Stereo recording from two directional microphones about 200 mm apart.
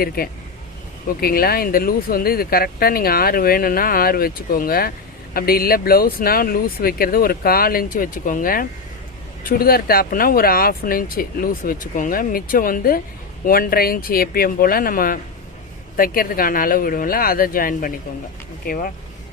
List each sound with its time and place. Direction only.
0.2 s speech: 45° left (ahead or behind)